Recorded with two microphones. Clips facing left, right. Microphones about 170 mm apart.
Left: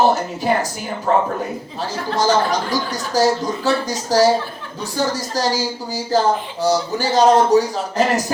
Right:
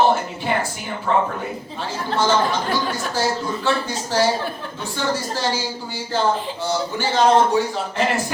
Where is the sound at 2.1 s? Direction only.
40° left (ahead or behind).